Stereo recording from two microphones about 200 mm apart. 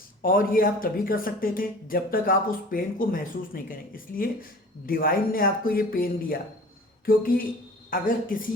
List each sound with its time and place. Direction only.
0.2 s speech: 45° left (ahead or behind)